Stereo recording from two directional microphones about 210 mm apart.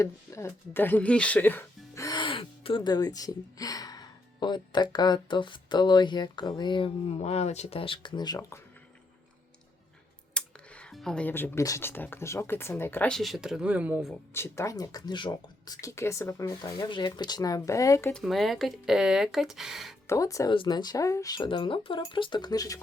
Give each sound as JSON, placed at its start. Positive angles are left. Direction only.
{"t": 0.0, "sound": "speech", "side_deg": 15}
{"t": 10.3, "sound": "speech", "side_deg": 5}
{"t": 14.3, "sound": "speech", "side_deg": 10}
{"t": 18.1, "sound": "speech", "side_deg": 0}
{"t": 20.1, "sound": "speech", "side_deg": 15}